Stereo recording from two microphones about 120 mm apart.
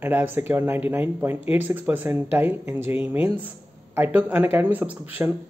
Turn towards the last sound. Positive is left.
turn(degrees=-15)  # may be behind; listen again after turning